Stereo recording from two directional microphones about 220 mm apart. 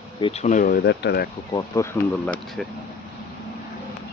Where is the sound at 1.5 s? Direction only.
15° left (ahead or behind).